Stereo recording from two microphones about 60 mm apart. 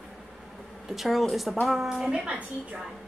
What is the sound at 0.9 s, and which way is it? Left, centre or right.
A woman's voice, centre.